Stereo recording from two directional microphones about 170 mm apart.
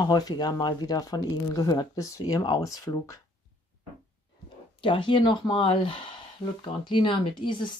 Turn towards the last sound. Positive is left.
turn(degrees=30)  # may be behind; listen again after turning